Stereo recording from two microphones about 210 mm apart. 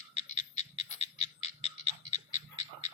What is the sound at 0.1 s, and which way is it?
Frog, 30° left (ahead or behind).